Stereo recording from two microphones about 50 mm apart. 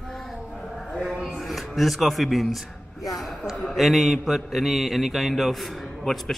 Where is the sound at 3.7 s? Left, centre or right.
Centre.